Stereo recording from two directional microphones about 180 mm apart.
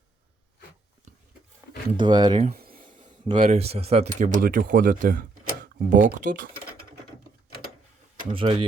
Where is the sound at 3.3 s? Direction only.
40° right (ahead or behind).